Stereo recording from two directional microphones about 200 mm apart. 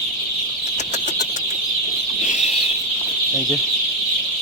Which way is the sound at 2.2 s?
35° left (ahead or behind).